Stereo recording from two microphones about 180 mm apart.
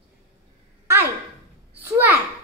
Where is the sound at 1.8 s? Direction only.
10° right (ahead or behind).